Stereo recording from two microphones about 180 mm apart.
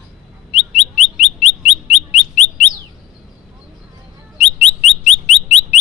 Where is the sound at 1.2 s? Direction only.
35° left (ahead or behind).